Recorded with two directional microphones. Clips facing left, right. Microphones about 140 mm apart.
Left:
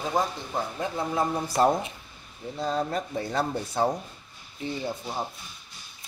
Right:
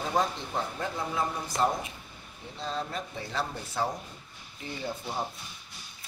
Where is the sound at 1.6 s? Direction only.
50° left (ahead or behind).